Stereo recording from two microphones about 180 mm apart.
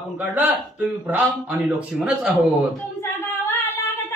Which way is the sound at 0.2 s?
10° right (ahead or behind).